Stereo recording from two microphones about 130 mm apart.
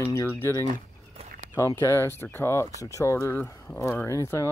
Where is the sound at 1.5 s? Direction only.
20° left (ahead or behind).